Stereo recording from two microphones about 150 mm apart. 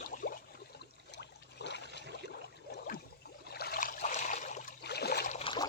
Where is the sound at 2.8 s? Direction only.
85° left; by 4.1 s 65° left (ahead or behind).